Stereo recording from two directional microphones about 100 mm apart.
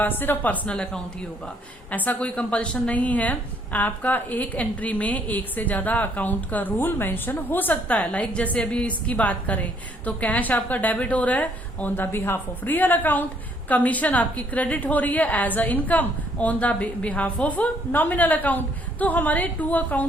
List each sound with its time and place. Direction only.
0.0 s a woman's voice: 20° left (ahead or behind)